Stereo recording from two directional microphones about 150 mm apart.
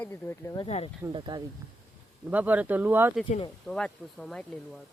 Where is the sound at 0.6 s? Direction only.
45° left (ahead or behind).